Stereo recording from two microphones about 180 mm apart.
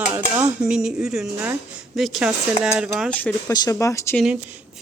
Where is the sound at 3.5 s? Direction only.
20° left (ahead or behind).